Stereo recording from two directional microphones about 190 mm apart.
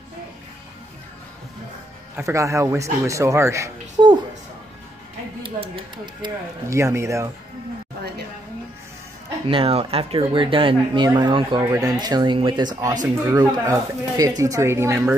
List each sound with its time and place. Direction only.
2.1 s speech: 15° right (ahead or behind)
6.2 s speech: 15° right (ahead or behind)
9.5 s speech: 30° right (ahead or behind); by 15.1 s 15° right (ahead or behind)